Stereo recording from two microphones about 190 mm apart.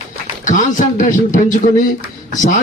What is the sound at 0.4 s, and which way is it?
Speech, 40° left (ahead or behind).